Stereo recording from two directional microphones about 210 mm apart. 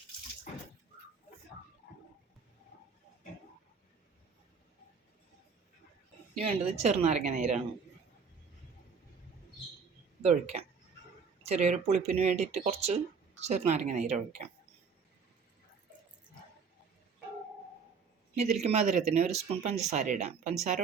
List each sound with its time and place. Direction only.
6.4 s speech: 30° right (ahead or behind)
11.4 s speech: 30° right (ahead or behind)
18.3 s speech: 30° right (ahead or behind)